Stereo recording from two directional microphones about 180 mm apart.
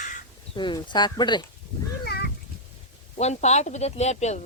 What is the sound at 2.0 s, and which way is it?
Cat, 60° left (ahead or behind).